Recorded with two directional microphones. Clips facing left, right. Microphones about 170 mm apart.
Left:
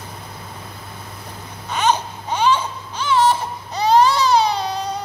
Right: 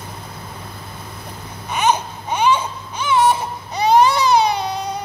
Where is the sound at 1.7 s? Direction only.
10° right (ahead or behind).